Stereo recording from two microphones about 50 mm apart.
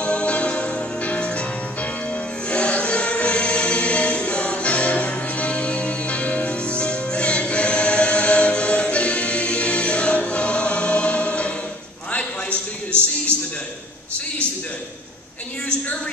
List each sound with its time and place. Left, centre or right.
0.0 s music: left
12.4 s music: right